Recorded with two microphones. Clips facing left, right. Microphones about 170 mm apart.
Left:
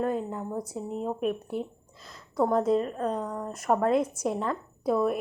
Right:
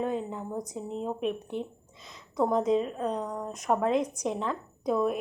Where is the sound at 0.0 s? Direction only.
Centre (ahead or behind).